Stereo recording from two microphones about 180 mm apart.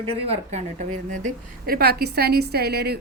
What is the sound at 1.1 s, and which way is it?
A woman's voice, 50° right (ahead or behind).